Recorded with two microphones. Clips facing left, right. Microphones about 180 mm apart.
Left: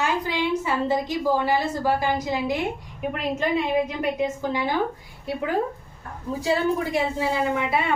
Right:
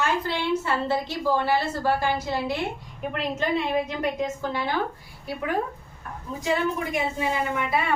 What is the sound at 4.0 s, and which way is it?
Speech, 10° left (ahead or behind).